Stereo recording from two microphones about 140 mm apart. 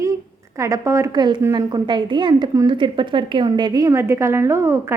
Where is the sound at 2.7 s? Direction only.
35° right (ahead or behind); by 5.0 s 15° right (ahead or behind).